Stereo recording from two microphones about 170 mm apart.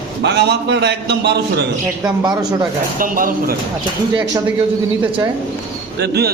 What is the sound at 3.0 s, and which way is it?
Speech, 55° right (ahead or behind).